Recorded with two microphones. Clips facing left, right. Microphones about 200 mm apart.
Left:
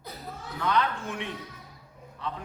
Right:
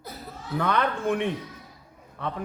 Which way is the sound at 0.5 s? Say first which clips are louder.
Right 3 dB; 55° right (ahead or behind).